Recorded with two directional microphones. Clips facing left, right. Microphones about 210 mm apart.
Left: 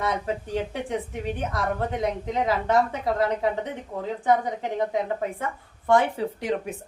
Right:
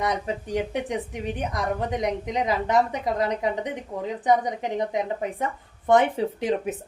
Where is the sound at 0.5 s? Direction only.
15° right (ahead or behind).